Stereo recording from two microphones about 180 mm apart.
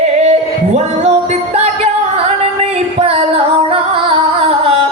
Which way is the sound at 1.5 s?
35° right (ahead or behind).